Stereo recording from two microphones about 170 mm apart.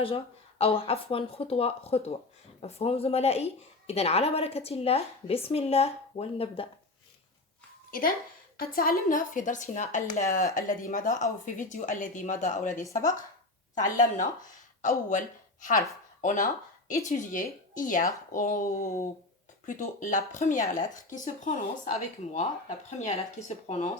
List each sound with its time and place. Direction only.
0.6 s a woman's voice: 35° left (ahead or behind)
7.9 s speech: 55° left (ahead or behind)
12.8 s speech: 20° left (ahead or behind)
13.9 s speech: 50° left (ahead or behind)
16.2 s a woman's voice: 50° left (ahead or behind)